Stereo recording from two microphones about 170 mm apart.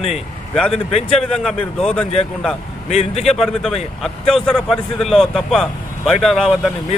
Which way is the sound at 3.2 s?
Centre (ahead or behind).